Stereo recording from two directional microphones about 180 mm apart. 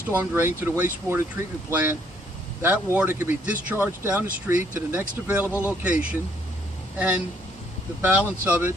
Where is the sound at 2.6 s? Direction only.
10° right (ahead or behind).